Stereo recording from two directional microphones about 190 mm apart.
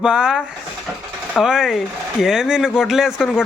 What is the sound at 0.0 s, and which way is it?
Speech, 5° right (ahead or behind).